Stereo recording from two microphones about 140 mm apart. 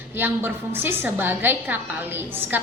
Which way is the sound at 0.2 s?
15° right (ahead or behind).